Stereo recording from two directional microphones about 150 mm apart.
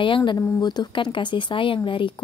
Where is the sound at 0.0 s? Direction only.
35° left (ahead or behind).